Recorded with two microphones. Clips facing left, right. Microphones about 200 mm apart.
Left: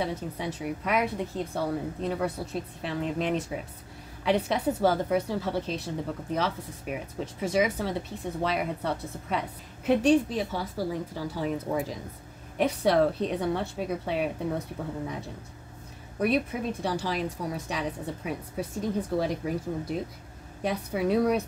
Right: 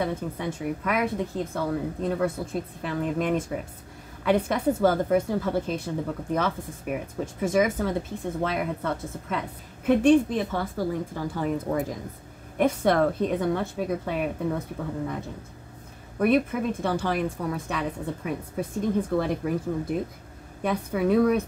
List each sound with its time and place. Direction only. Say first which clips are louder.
0.0 s a woman's voice: right 3 dB; 55° right (ahead or behind)